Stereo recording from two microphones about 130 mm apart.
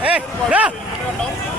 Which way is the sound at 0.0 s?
10° right (ahead or behind).